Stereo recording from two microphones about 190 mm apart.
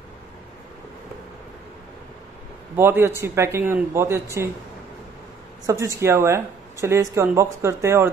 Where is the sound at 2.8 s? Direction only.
10° right (ahead or behind).